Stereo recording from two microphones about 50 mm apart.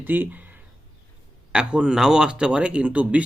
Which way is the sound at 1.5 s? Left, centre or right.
Centre.